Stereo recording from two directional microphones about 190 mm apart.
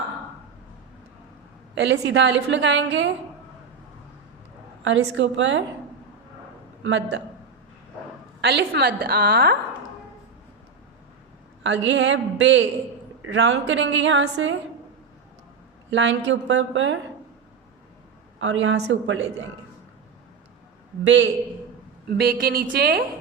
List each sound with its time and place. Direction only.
1.7 s a woman's voice: 70° right (ahead or behind)
4.8 s a woman's voice: 75° right (ahead or behind)
6.8 s a woman's voice: 70° right (ahead or behind)
8.4 s a woman's voice: 65° right (ahead or behind)
11.6 s a woman's voice: 70° right (ahead or behind)
13.2 s a woman's voice: 90° right
15.9 s a woman's voice: 75° right (ahead or behind)
18.3 s a woman's voice: 80° right
21.0 s a woman's voice: 70° right (ahead or behind)
22.2 s a woman's voice: 55° right (ahead or behind)